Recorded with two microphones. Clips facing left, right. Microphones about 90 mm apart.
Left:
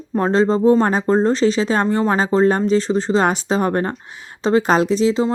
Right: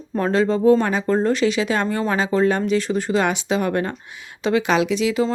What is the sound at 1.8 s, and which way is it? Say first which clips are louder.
Speech: left 4 dB; 25° left (ahead or behind).